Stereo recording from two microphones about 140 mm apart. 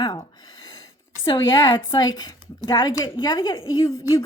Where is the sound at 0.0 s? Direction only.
30° left (ahead or behind).